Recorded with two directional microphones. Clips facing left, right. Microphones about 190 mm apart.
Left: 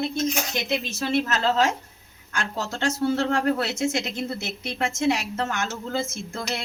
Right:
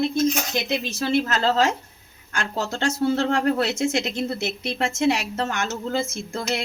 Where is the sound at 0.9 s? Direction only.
35° right (ahead or behind).